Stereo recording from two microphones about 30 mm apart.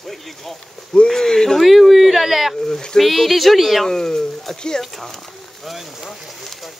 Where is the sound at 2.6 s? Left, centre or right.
Centre.